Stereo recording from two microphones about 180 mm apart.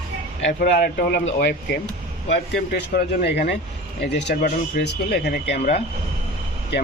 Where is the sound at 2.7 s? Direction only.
65° left (ahead or behind).